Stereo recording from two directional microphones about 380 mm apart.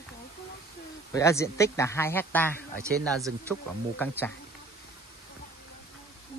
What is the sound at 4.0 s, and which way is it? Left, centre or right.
Speech, centre.